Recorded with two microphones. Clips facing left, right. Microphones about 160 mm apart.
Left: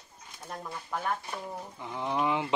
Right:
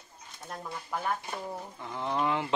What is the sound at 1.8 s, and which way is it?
Speech, 15° left (ahead or behind).